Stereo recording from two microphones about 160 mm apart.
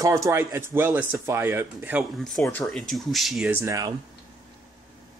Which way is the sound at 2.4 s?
15° left (ahead or behind).